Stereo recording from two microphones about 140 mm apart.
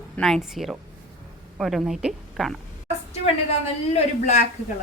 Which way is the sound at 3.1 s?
50° left (ahead or behind).